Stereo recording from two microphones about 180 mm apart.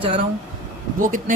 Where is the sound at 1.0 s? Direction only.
50° right (ahead or behind).